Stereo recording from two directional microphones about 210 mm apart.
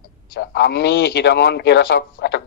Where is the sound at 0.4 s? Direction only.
50° left (ahead or behind).